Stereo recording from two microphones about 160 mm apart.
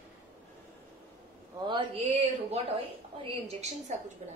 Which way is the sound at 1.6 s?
35° right (ahead or behind).